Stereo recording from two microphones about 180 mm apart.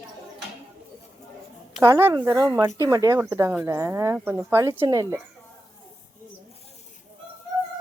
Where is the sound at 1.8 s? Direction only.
15° right (ahead or behind).